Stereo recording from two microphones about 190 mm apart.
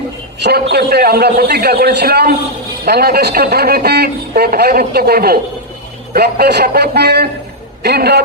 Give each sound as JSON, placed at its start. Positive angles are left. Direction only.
{"t": 0.3, "sound": "a man's voice", "side_deg": -60}